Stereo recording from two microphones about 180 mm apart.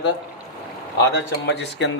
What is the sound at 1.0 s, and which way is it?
Speech, 75° left (ahead or behind).